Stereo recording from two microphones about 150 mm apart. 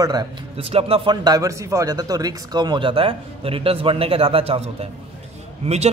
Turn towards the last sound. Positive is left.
turn(degrees=-45)  # may be behind; listen again after turning